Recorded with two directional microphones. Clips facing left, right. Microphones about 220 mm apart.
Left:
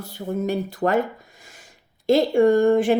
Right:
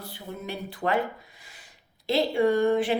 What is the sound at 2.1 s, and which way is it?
Speech, 45° left (ahead or behind).